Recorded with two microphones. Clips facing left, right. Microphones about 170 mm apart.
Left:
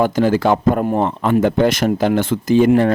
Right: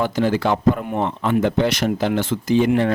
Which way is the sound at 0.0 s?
45° left (ahead or behind).